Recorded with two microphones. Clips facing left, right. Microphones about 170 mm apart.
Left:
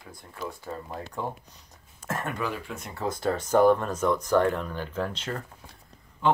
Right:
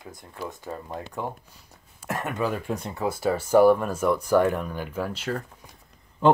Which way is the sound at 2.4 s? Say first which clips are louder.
Right 5 dB; 45° right (ahead or behind).